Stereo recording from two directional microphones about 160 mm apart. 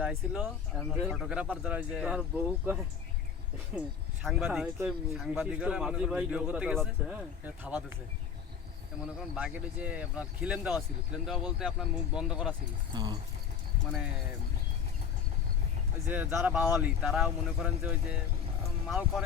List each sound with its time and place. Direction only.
0.0 s speech: 5° right (ahead or behind)
3.8 s a man's voice: centre (ahead or behind)
9.1 s speech: 5° right (ahead or behind)
12.9 s speech: 25° right (ahead or behind)
16.0 s a man's voice: 10° right (ahead or behind)